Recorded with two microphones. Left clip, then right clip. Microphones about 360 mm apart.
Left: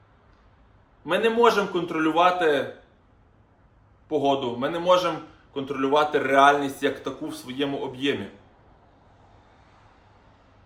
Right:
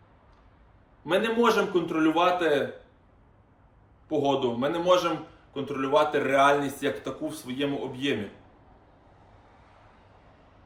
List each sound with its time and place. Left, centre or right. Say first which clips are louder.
1.0 s speech: left 4 dB; centre
4.1 s speech: left 2 dB; centre